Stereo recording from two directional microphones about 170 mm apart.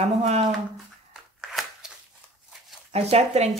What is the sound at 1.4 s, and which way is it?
Scissors, centre (ahead or behind).